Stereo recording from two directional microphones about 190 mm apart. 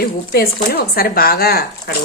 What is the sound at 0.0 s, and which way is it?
Speech, 55° left (ahead or behind).